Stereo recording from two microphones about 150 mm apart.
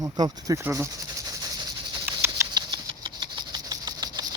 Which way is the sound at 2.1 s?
15° right (ahead or behind).